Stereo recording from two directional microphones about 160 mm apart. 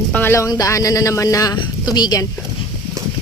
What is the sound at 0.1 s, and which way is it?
Speech, 15° left (ahead or behind).